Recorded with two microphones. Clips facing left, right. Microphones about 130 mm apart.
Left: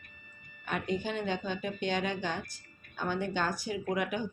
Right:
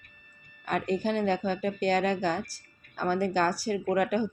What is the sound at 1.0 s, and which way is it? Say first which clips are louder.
Speech: right 7 dB; 40° right (ahead or behind).